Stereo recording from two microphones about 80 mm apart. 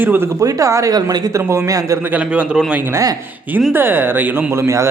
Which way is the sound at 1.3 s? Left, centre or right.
Right.